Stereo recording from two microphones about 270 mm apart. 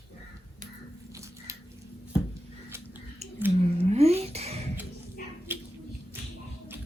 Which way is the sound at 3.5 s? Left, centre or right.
Right.